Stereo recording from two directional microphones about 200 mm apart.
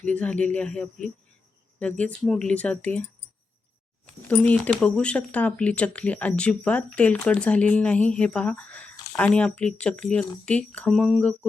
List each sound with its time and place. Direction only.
0.0 s speech: 5° left (ahead or behind)
4.0 s a sound: 5° left (ahead or behind)
4.7 s speech: 5° left (ahead or behind)